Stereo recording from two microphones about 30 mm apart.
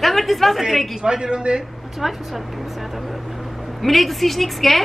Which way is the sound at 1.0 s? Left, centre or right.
Right.